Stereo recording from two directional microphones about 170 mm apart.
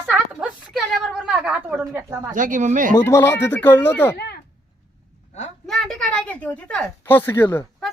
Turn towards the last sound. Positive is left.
turn(degrees=15)  # may be behind; listen again after turning